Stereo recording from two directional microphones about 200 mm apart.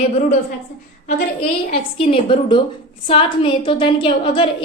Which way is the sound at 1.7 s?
30° left (ahead or behind).